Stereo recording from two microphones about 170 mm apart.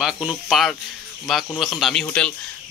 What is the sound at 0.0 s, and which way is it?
Speech, centre (ahead or behind).